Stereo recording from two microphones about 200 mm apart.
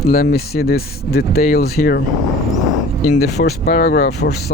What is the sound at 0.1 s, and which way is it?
Speech, 50° left (ahead or behind).